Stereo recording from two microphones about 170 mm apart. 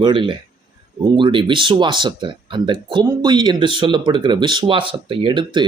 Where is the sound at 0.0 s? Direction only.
30° right (ahead or behind).